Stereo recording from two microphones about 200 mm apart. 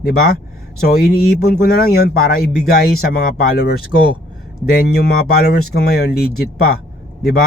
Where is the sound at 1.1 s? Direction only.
50° left (ahead or behind).